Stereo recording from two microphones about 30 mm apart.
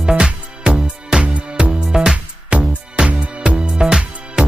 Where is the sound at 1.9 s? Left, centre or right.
Centre.